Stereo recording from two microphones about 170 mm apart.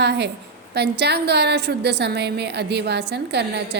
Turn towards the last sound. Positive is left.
turn(degrees=-75)  # may be behind; listen again after turning